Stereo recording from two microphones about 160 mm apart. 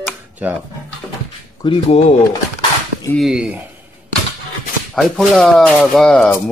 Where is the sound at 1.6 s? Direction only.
30° left (ahead or behind).